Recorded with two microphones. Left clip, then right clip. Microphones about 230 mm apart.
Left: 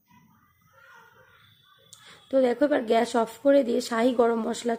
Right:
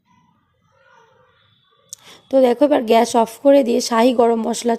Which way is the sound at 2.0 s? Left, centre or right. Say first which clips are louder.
Right 9 dB; right.